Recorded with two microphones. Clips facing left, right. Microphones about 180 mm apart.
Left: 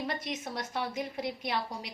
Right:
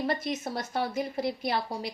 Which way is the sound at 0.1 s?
40° right (ahead or behind).